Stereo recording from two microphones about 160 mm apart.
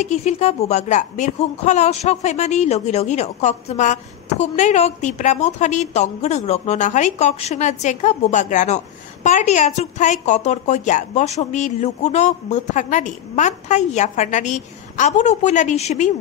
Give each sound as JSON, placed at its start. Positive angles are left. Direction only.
{"t": 0.0, "sound": "a woman's voice", "side_deg": 45}